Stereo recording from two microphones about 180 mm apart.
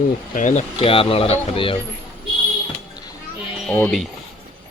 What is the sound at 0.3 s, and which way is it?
Speech, 45° left (ahead or behind).